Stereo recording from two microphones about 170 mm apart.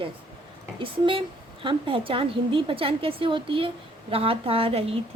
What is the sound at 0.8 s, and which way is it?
A woman's voice, 30° right (ahead or behind).